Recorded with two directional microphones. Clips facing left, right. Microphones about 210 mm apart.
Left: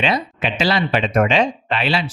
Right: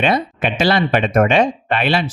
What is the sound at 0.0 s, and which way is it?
Speech, 55° right (ahead or behind).